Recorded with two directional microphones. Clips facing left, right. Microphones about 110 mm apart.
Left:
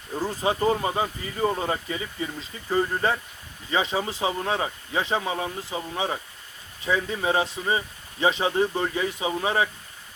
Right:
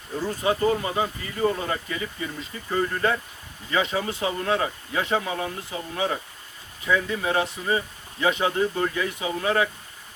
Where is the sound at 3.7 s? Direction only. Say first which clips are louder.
Even; 25° left (ahead or behind).